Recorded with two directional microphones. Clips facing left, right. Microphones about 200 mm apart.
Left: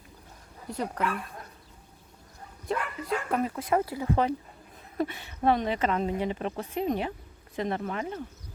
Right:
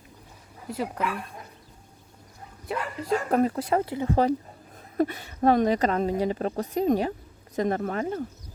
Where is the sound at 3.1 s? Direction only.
40° right (ahead or behind).